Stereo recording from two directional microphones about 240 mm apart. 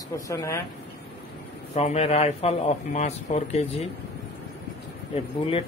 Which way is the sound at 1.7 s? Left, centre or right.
Left.